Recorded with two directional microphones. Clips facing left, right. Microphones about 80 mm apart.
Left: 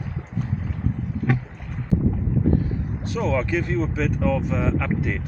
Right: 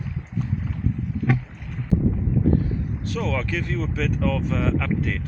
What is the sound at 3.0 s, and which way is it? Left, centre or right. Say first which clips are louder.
Speech: left 4 dB; left.